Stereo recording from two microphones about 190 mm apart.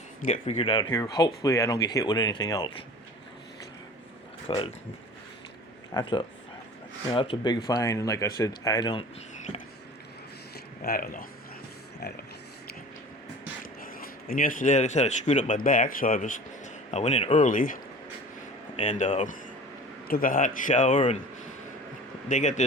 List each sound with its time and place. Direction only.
0.2 s speech: 40° left (ahead or behind); by 2.7 s 20° left (ahead or behind)
4.4 s speech: 30° left (ahead or behind)
5.9 s speech: 20° left (ahead or behind)
10.8 s speech: 50° left (ahead or behind)
13.8 s speech: 50° left (ahead or behind)
18.8 s speech: 40° left (ahead or behind)
22.3 s speech: 40° left (ahead or behind)